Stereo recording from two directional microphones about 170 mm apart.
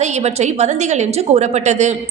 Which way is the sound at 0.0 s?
40° right (ahead or behind).